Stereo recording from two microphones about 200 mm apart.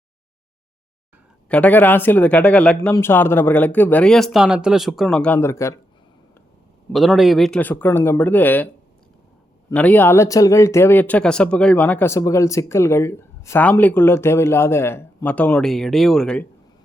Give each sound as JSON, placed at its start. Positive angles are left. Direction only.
{"t": 1.5, "sound": "speech", "side_deg": 5}
{"t": 6.9, "sound": "speech", "side_deg": 0}